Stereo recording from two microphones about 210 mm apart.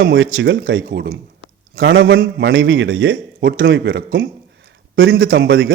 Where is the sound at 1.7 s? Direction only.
60° right (ahead or behind).